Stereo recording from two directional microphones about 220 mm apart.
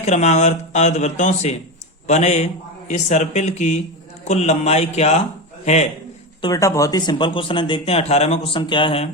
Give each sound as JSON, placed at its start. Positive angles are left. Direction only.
{"t": 0.0, "sound": "a man's voice", "side_deg": 30}
{"t": 6.4, "sound": "speech", "side_deg": 15}